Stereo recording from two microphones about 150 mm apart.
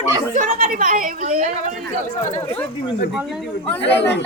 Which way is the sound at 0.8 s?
65° right (ahead or behind).